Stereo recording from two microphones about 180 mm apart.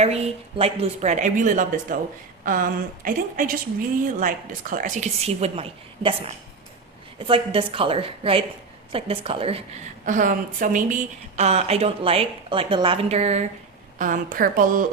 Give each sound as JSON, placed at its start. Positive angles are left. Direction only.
{"t": 0.0, "sound": "a woman's voice", "side_deg": -35}
{"t": 10.1, "sound": "a woman's voice", "side_deg": -45}
{"t": 14.0, "sound": "a woman's voice", "side_deg": -50}